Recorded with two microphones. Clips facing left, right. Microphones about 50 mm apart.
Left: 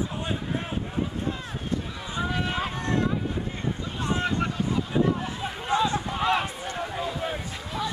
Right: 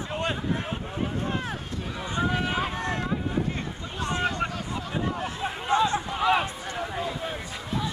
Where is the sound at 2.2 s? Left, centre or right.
Centre.